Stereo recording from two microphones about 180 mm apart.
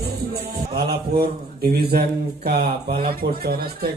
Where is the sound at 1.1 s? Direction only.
60° right (ahead or behind).